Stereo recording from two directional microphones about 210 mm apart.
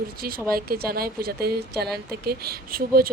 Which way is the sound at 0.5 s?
45° right (ahead or behind).